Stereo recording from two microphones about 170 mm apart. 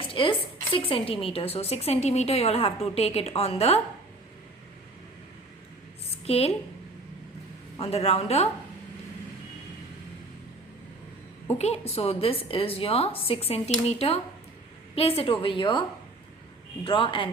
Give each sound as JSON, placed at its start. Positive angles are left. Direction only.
{"t": 0.1, "sound": "a woman's voice", "side_deg": 30}
{"t": 6.2, "sound": "a woman's voice", "side_deg": 35}
{"t": 7.8, "sound": "a woman's voice", "side_deg": 35}
{"t": 11.5, "sound": "a woman's voice", "side_deg": 40}
{"t": 16.8, "sound": "a woman's voice", "side_deg": 30}